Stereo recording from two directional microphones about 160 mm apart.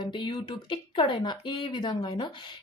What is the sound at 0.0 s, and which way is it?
A woman's voice, 30° left (ahead or behind).